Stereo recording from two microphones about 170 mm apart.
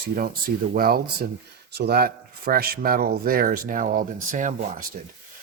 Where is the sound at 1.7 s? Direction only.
70° right (ahead or behind); by 4.5 s 50° right (ahead or behind).